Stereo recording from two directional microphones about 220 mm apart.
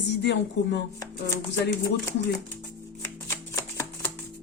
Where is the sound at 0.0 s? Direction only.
55° left (ahead or behind).